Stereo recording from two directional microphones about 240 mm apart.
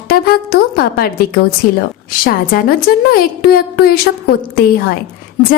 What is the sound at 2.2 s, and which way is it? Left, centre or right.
A woman's voice, left.